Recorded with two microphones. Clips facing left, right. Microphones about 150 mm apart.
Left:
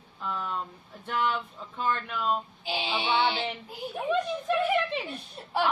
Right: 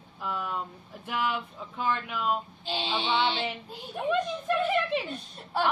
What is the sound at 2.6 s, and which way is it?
Speech, 10° left (ahead or behind).